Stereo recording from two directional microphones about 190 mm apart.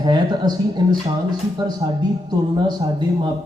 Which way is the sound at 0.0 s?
20° right (ahead or behind).